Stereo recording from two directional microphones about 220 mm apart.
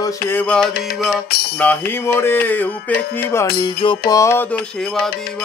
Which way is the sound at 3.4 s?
25° left (ahead or behind).